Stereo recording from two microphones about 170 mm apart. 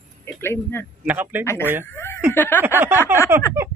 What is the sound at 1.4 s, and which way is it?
Speech, 15° left (ahead or behind).